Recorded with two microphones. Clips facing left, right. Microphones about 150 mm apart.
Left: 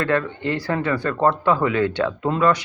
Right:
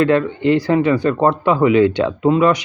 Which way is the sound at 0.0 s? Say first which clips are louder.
Right 7 dB; 20° right (ahead or behind).